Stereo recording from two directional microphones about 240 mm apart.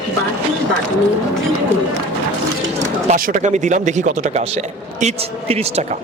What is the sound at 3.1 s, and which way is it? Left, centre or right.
A man's voice, right.